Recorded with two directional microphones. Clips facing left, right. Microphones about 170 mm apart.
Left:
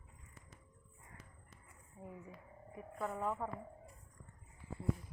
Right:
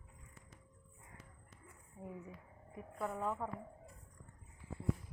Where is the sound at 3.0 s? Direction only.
Centre (ahead or behind).